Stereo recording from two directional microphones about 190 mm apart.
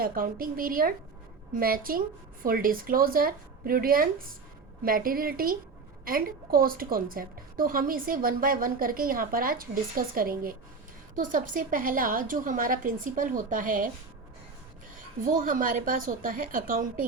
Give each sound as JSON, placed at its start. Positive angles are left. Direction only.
{"t": 0.0, "sound": "a woman's voice", "side_deg": -50}
{"t": 14.9, "sound": "a woman's voice", "side_deg": -45}